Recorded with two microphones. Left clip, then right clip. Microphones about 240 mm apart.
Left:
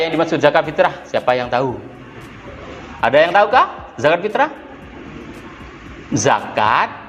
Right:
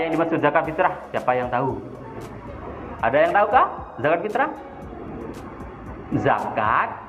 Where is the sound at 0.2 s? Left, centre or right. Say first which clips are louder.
Left 6 dB; left.